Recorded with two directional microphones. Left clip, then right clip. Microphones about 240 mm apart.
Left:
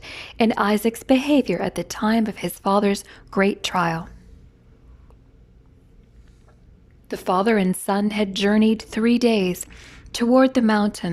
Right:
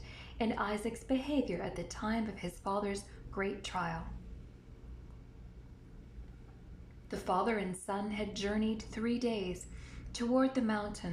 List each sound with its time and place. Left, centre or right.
0.0 s a woman's voice: left
7.1 s a woman's voice: left